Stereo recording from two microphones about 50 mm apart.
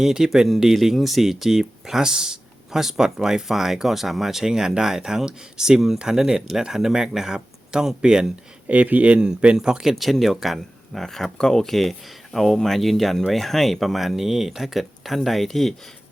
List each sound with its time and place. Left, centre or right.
0.0 s speech: centre
8.6 s speech: right
9.6 s speech: centre
9.9 s speech: centre